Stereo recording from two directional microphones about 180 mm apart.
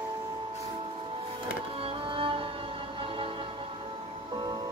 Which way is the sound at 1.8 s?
30° right (ahead or behind).